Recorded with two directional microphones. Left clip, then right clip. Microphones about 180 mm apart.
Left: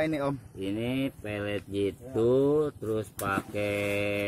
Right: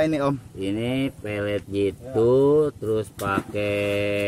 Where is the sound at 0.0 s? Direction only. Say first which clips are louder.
Right 7 dB; 5° right (ahead or behind).